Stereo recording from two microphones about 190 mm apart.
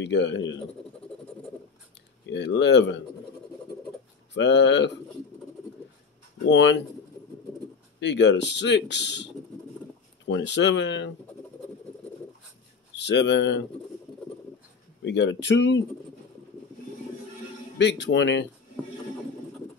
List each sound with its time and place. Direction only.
0.0 s speech: 70° left (ahead or behind)
2.2 s speech: 65° left (ahead or behind)
4.3 s speech: 65° left (ahead or behind)
6.5 s speech: 70° left (ahead or behind)
8.0 s speech: 65° left (ahead or behind)
12.9 s speech: 65° left (ahead or behind)
15.0 s speech: 65° left (ahead or behind)
17.7 s speech: 65° left (ahead or behind)